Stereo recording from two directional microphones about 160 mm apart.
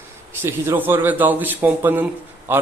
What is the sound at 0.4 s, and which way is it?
Speech, 15° right (ahead or behind).